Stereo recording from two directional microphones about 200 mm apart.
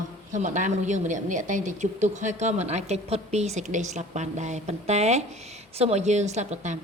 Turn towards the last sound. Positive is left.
turn(degrees=-35)  # may be behind; listen again after turning